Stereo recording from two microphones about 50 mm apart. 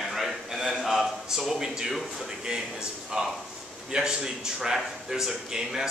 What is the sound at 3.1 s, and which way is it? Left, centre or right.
A man's voice, centre.